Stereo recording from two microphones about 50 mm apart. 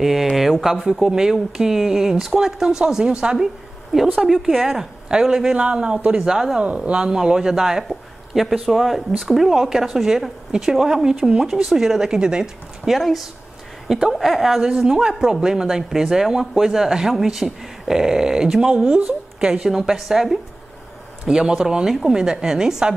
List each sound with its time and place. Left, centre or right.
0.0 s a woman's voice: centre
4.3 s a woman's voice: centre; by 6.2 s right
6.2 s speech: centre
6.6 s speech: right
12.8 s a woman's voice: centre
14.6 s a man's voice: centre
19.7 s speech: centre